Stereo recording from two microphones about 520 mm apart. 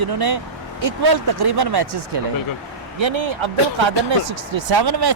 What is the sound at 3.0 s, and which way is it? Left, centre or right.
Speech, right.